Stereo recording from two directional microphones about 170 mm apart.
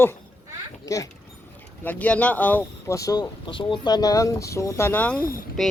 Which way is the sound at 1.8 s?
10° left (ahead or behind).